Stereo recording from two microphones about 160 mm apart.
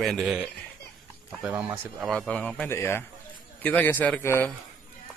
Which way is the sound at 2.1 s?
5° left (ahead or behind).